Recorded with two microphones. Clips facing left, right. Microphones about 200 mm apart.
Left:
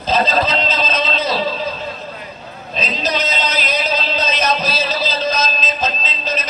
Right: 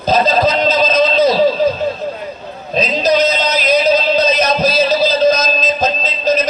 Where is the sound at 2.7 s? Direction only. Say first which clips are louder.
Right 8 dB; 40° right (ahead or behind).